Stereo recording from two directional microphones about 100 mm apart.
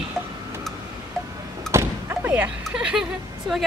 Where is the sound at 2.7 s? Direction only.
10° right (ahead or behind).